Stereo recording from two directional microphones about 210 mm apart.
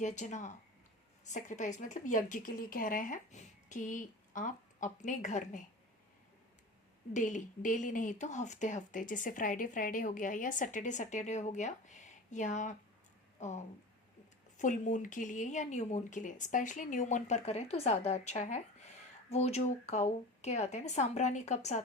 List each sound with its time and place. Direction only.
0.0 s speech: 35° left (ahead or behind)
7.1 s speech: 35° left (ahead or behind)